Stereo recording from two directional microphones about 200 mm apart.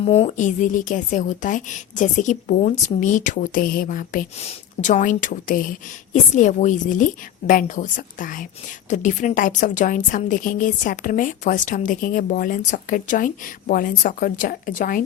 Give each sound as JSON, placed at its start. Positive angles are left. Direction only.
{"t": 0.0, "sound": "a woman's voice", "side_deg": 30}